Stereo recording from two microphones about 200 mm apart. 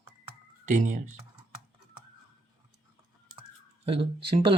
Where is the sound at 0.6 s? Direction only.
40° right (ahead or behind).